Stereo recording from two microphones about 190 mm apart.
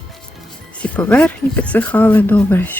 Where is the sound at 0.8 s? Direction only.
5° left (ahead or behind).